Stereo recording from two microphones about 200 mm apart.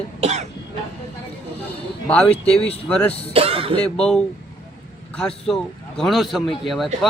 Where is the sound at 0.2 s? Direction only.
35° right (ahead or behind).